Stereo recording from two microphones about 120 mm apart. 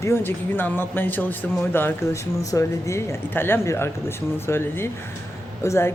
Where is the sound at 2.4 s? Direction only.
30° left (ahead or behind).